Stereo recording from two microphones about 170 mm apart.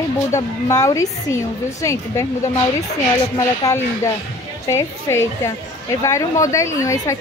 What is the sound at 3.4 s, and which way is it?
A woman's voice, 20° left (ahead or behind).